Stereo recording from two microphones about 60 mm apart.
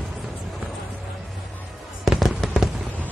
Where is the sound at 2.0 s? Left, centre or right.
Centre.